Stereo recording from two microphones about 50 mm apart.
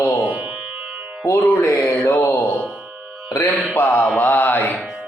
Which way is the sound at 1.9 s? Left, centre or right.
Left.